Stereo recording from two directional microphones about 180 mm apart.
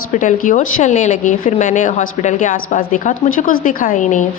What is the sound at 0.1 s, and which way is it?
A woman's voice, 45° left (ahead or behind).